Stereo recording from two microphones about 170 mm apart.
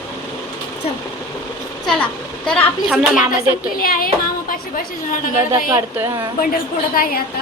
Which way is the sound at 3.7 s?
55° left (ahead or behind).